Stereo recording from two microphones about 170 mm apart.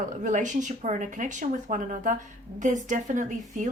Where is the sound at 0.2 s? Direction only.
45° right (ahead or behind).